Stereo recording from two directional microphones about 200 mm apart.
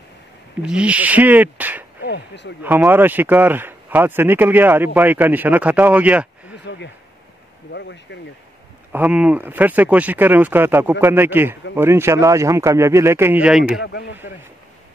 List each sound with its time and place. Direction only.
0.6 s speech: 5° right (ahead or behind)
2.0 s speech: 60° left (ahead or behind)
2.6 s speech: 10° right (ahead or behind)
6.5 s chop: 60° left (ahead or behind)
7.7 s speech: 60° left (ahead or behind)
8.9 s speech: 5° right (ahead or behind)
13.8 s speech: 60° left (ahead or behind)